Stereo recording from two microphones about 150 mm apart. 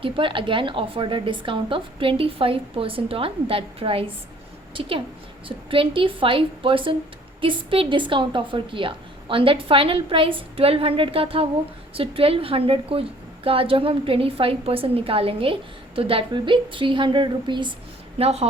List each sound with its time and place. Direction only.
0.0 s a woman's voice: 35° right (ahead or behind)
18.2 s a woman's voice: 45° right (ahead or behind)